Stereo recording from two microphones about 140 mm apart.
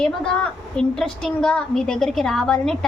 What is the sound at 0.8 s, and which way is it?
A woman's voice, 5° left (ahead or behind).